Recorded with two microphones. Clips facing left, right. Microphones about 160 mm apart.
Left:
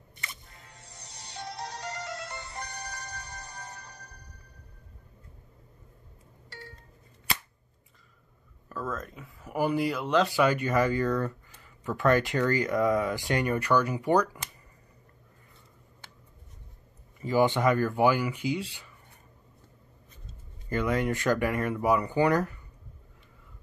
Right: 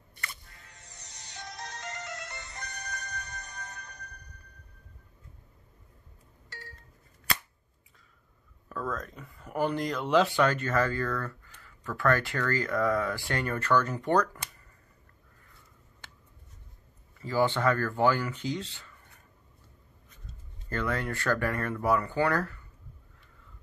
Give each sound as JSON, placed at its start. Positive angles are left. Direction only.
{"t": 0.1, "sound": "music", "side_deg": 20}
{"t": 1.5, "sound": "music", "side_deg": 35}
{"t": 3.3, "sound": "music", "side_deg": 30}
{"t": 8.6, "sound": "speech", "side_deg": 5}
{"t": 10.4, "sound": "speech", "side_deg": 10}
{"t": 17.2, "sound": "speech", "side_deg": 15}
{"t": 20.2, "sound": "speech", "side_deg": 15}